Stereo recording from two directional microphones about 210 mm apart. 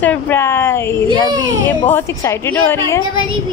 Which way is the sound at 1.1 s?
20° right (ahead or behind).